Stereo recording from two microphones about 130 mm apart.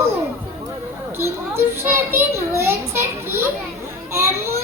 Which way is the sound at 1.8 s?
20° right (ahead or behind).